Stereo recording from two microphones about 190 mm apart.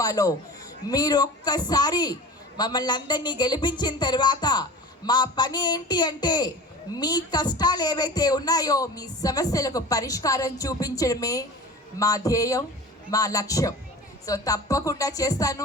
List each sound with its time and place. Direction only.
0.0 s speech: 20° left (ahead or behind)